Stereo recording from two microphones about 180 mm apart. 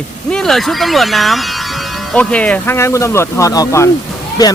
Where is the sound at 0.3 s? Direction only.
5° left (ahead or behind).